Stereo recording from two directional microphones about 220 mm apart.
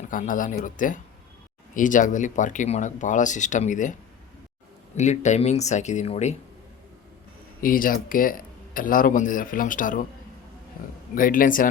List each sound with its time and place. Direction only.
0.1 s speech: 35° left (ahead or behind)
4.9 s speech: 30° left (ahead or behind)
7.6 s speech: 40° left (ahead or behind)
11.1 s speech: 40° left (ahead or behind)